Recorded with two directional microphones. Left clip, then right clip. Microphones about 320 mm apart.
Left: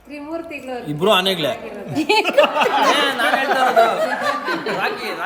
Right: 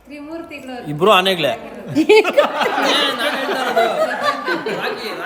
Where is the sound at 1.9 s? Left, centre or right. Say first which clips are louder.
Right 5 dB; centre.